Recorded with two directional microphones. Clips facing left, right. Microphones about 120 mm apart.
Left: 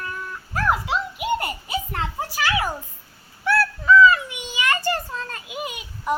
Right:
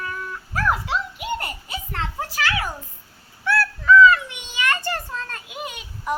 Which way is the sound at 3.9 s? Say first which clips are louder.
Right 1 dB; 5° left (ahead or behind).